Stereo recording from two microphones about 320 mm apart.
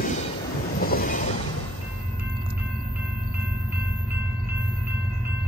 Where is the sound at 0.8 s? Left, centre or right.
Left.